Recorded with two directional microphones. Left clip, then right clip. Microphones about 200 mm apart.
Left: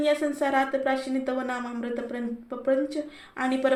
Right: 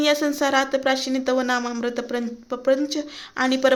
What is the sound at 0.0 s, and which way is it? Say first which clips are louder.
Speech: right 4 dB; 45° right (ahead or behind).